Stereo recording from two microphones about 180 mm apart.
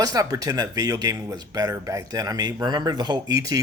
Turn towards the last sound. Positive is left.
turn(degrees=-20)  # may be behind; listen again after turning